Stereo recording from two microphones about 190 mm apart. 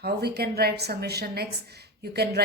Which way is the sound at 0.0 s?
55° right (ahead or behind).